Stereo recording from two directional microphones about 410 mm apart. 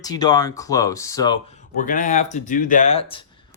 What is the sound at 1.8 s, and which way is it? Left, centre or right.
Speech, centre.